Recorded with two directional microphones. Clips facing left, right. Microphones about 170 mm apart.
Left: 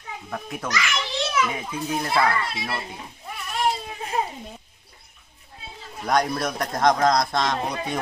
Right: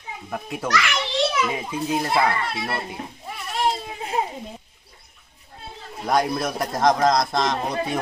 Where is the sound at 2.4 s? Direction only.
55° right (ahead or behind).